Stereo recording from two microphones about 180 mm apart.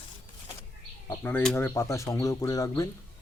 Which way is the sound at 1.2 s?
5° left (ahead or behind).